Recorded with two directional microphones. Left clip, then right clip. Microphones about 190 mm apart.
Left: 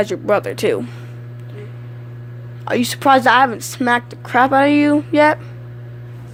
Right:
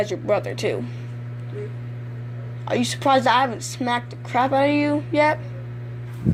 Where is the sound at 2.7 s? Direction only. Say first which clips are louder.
Left 6 dB; 35° left (ahead or behind).